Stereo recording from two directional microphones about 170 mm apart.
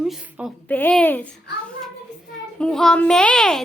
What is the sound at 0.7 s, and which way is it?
Speech, 10° left (ahead or behind).